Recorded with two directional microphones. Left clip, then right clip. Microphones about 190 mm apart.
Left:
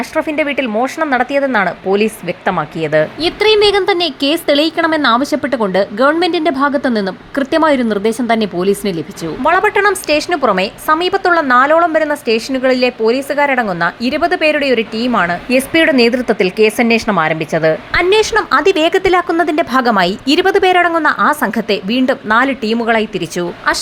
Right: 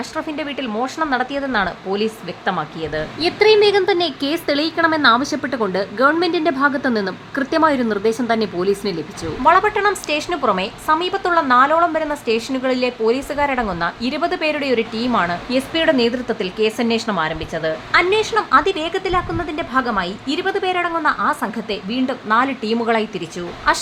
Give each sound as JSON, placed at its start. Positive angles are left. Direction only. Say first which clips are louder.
{"t": 0.2, "sound": "speech", "louder": "left 10 dB", "side_deg": 20}
{"t": 1.9, "sound": "speech", "louder": "left 7 dB", "side_deg": 10}